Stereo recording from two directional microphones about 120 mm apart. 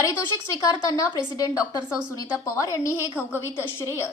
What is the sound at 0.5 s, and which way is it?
A woman's voice, 30° left (ahead or behind).